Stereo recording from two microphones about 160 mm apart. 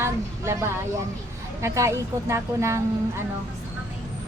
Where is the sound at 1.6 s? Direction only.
20° right (ahead or behind).